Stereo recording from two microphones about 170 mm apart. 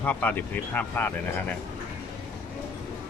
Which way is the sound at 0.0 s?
10° left (ahead or behind).